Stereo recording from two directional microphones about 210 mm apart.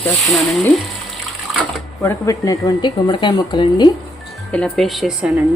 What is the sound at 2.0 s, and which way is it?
Speech, 15° left (ahead or behind).